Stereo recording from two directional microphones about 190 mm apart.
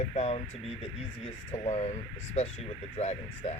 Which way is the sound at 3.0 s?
35° left (ahead or behind).